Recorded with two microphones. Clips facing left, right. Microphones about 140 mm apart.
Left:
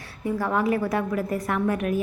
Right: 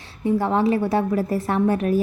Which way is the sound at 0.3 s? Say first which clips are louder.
Right 4 dB; 25° right (ahead or behind).